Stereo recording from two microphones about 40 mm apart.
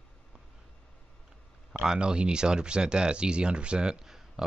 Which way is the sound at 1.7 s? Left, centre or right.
Right.